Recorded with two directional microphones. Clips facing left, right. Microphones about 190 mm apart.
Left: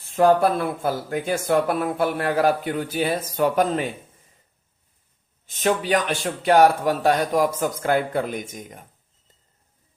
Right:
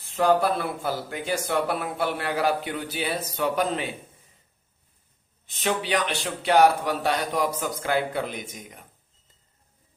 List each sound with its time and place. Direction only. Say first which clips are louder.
0.8 s speech: left 5 dB; 50° left (ahead or behind)
5.5 s speech: left 5 dB; 45° left (ahead or behind)